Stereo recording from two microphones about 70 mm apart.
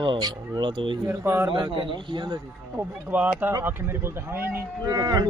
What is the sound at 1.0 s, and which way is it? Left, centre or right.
Speech, right.